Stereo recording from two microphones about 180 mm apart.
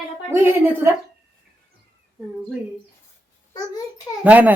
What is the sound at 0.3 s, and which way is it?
Speech, 15° right (ahead or behind).